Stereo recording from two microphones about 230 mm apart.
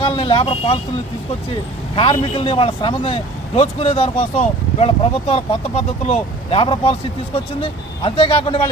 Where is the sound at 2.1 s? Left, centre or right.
Left.